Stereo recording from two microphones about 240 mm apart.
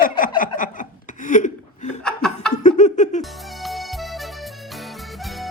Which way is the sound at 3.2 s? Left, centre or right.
Centre.